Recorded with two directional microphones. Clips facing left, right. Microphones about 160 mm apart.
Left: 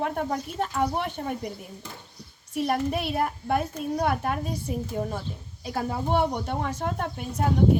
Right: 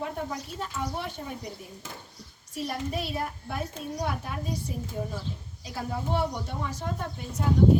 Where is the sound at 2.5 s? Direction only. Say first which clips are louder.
Left 6 dB; 60° left (ahead or behind).